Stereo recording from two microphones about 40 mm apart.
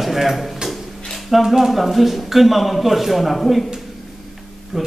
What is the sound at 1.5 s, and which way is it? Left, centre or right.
A man's voice, centre.